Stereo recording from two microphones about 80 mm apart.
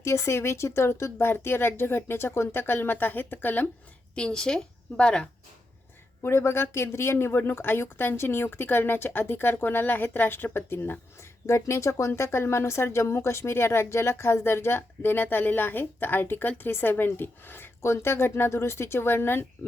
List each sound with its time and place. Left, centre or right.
0.0 s speech: left
4.1 s a woman's voice: centre
6.2 s speech: left